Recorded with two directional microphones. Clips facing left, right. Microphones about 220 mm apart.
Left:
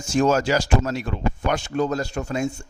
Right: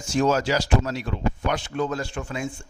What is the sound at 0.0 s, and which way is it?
Speech, 45° left (ahead or behind).